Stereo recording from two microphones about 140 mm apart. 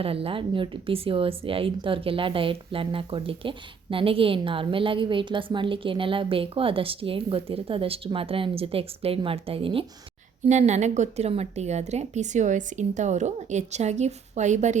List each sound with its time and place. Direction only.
0.0 s speech: 40° right (ahead or behind)
10.4 s a woman's voice: 55° right (ahead or behind)